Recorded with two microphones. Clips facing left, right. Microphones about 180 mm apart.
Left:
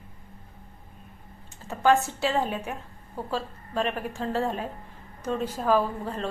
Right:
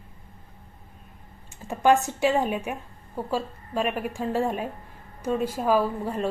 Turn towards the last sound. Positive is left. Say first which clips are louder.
# right 2 dB
turn(degrees=-10)  # may be behind; listen again after turning